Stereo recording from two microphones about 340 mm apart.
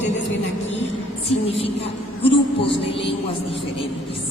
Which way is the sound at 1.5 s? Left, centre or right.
Centre.